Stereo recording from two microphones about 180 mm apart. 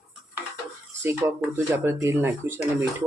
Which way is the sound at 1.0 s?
15° right (ahead or behind).